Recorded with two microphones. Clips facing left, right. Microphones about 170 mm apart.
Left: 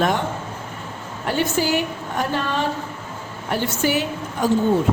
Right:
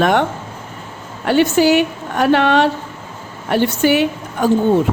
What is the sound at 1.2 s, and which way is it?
A woman's voice, 75° right (ahead or behind).